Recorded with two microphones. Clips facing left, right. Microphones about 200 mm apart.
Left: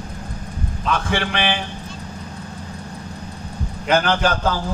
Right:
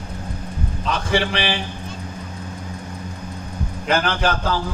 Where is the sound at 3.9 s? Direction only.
45° left (ahead or behind).